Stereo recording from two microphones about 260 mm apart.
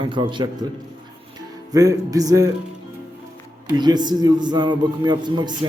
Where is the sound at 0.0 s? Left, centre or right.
Centre.